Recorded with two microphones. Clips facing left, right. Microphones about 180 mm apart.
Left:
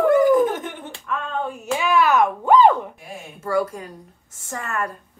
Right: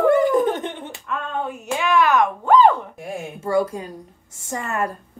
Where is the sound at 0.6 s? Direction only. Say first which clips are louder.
Right 3 dB; 25° right (ahead or behind).